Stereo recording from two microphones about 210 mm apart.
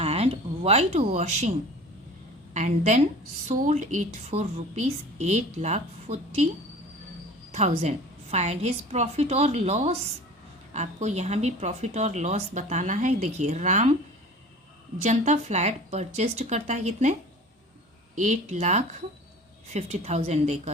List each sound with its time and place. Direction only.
0.0 s a sound: 30° right (ahead or behind)
2.5 s speech: 35° right (ahead or behind)
7.5 s speech: 30° right (ahead or behind)
15.0 s speech: 35° right (ahead or behind)